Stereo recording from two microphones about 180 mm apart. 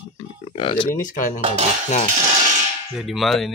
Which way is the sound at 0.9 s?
50° left (ahead or behind).